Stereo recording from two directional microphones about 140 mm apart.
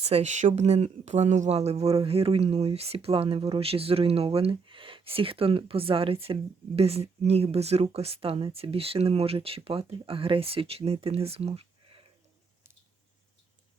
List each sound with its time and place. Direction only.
0.0 s speech: 50° right (ahead or behind)